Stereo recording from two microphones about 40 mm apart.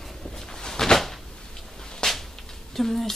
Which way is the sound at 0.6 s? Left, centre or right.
Centre.